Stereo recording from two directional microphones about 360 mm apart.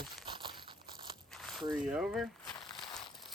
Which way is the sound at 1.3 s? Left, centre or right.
Centre.